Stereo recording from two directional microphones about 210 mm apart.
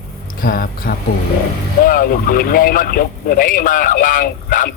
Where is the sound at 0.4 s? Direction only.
45° left (ahead or behind).